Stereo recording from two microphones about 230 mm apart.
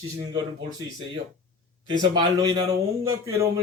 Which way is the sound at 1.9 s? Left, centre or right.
Centre.